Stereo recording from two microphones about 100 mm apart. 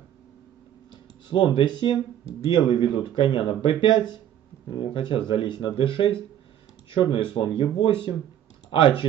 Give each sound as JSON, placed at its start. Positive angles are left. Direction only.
{"t": 1.6, "sound": "speech", "side_deg": 55}